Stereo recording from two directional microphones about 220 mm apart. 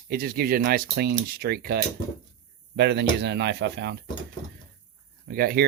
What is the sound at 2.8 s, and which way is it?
Speech, 50° right (ahead or behind).